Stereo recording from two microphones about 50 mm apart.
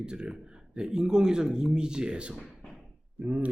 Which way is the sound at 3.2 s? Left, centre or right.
Right.